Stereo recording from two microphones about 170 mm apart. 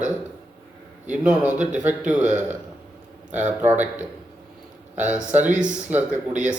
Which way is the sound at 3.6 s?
10° right (ahead or behind).